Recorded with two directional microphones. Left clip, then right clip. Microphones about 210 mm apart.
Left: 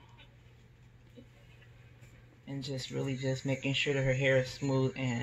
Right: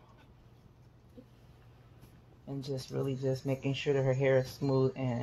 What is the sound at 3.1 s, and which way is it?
Speech, 15° right (ahead or behind).